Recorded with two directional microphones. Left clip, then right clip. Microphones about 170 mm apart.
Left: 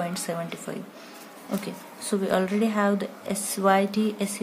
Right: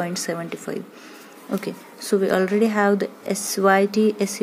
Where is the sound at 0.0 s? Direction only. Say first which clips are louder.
Right 3 dB; 25° right (ahead or behind).